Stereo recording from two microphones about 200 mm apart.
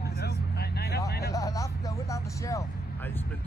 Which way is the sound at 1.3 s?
15° left (ahead or behind).